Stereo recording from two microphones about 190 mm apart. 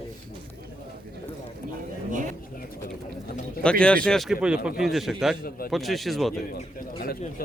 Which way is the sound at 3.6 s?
5° left (ahead or behind).